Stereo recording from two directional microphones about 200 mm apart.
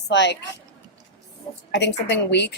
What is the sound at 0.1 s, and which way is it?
Speech, 60° left (ahead or behind).